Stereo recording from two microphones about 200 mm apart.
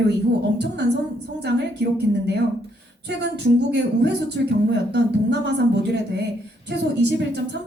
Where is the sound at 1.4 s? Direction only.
55° right (ahead or behind).